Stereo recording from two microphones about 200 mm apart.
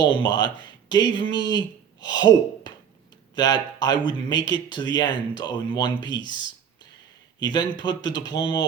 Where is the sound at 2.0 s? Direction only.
20° left (ahead or behind).